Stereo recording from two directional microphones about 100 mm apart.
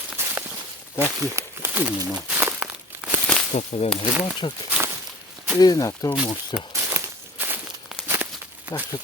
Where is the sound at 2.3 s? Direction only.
15° right (ahead or behind).